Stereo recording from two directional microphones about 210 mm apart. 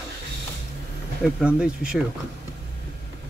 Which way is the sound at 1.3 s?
5° right (ahead or behind).